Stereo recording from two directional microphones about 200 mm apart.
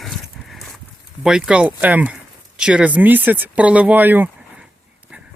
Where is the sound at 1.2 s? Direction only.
5° right (ahead or behind).